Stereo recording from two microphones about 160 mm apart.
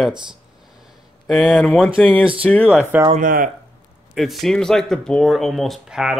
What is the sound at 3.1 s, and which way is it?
Speech, 55° right (ahead or behind).